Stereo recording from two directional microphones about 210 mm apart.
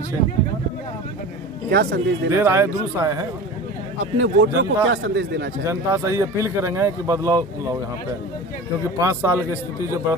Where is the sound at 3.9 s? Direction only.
70° right (ahead or behind).